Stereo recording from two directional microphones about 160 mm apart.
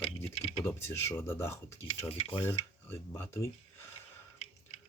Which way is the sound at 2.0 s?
30° left (ahead or behind).